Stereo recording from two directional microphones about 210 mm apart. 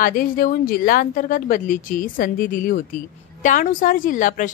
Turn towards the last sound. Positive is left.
turn(degrees=40)  # may be behind; listen again after turning